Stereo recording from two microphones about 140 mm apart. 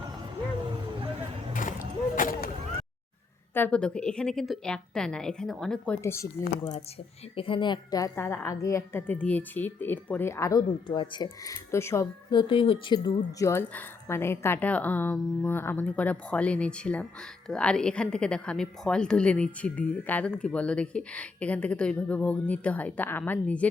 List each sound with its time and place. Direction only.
2.1 s a sound: 85° left
3.5 s a woman's voice: 10° left (ahead or behind)
6.0 s a woman's voice: 20° left (ahead or behind)
7.3 s a woman's voice: 40° left (ahead or behind); by 10.6 s 20° left (ahead or behind)
10.8 s a woman's voice: 35° left (ahead or behind)
12.3 s speech: 35° left (ahead or behind)
13.5 s speech: 15° left (ahead or behind)